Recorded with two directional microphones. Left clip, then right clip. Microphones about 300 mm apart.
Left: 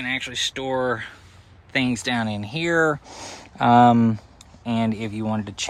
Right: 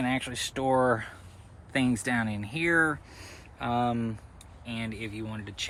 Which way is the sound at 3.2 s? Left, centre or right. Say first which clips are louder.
Left 14 dB; left.